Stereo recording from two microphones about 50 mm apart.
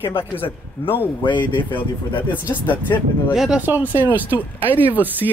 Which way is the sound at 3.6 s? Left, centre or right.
Right.